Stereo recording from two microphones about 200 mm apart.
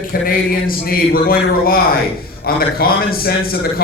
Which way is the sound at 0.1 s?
45° left (ahead or behind).